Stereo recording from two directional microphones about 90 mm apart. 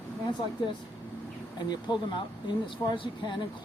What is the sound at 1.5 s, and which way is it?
Speech, 55° left (ahead or behind).